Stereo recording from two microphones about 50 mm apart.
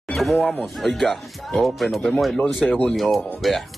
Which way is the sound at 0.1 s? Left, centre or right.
Centre.